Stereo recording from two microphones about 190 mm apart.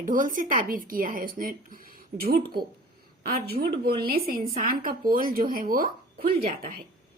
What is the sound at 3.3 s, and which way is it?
A woman's voice, 55° right (ahead or behind).